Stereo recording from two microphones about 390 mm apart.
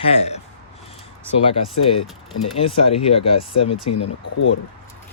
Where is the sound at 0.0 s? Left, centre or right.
Centre.